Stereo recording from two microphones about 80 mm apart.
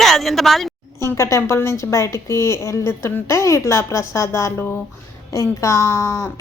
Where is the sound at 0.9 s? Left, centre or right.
Left.